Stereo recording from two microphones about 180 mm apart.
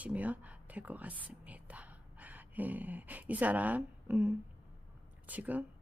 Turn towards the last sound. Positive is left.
turn(degrees=-10)  # may be behind; listen again after turning